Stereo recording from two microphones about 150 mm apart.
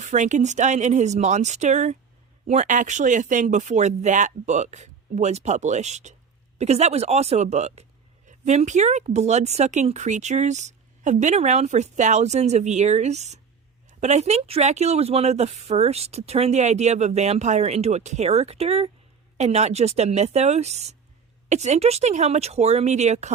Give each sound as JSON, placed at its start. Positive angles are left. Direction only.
{"t": 0.0, "sound": "speech", "side_deg": -55}